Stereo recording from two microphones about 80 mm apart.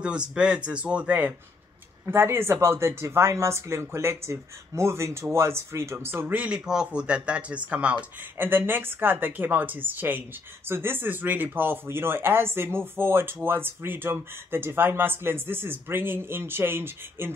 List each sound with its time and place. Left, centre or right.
0.0 s speech: centre
2.0 s speech: right